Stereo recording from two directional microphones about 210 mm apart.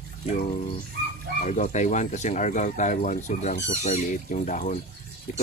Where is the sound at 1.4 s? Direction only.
35° left (ahead or behind).